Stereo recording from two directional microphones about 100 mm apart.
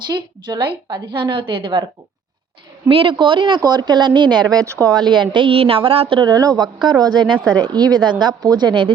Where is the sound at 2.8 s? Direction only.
60° right (ahead or behind); by 4.6 s 45° right (ahead or behind).